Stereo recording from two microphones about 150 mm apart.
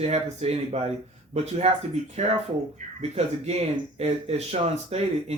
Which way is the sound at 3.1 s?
45° right (ahead or behind).